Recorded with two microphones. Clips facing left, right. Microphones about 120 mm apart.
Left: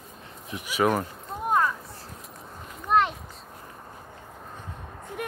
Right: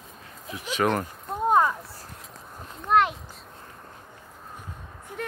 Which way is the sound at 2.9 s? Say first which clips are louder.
Right 1 dB; centre (ahead or behind).